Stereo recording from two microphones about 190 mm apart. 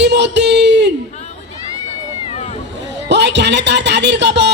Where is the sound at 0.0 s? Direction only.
65° right (ahead or behind).